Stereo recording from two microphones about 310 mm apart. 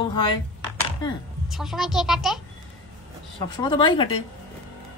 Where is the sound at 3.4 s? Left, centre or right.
Centre.